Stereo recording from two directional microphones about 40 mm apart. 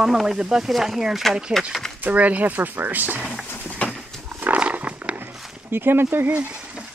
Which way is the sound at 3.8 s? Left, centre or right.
Left.